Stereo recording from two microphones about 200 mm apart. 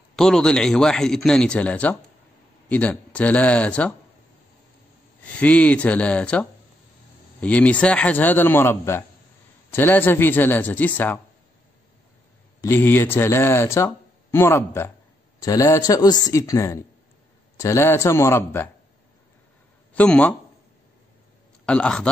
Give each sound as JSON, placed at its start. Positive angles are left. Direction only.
{"t": 0.1, "sound": "a man's voice", "side_deg": 0}
{"t": 5.4, "sound": "speech", "side_deg": 5}
{"t": 12.6, "sound": "speech", "side_deg": 10}
{"t": 19.9, "sound": "speech", "side_deg": 5}
{"t": 21.6, "sound": "a man's voice", "side_deg": 5}